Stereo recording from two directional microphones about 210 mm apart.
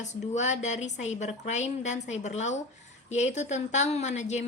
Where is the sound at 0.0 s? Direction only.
35° left (ahead or behind).